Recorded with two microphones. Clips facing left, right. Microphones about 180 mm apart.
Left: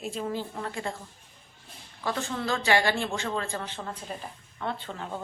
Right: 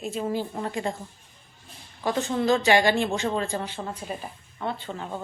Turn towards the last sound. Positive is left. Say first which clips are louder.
# right 2 dB
turn(degrees=-5)  # may be behind; listen again after turning